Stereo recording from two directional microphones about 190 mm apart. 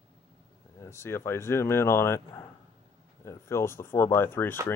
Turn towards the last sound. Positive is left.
turn(degrees=10)  # may be behind; listen again after turning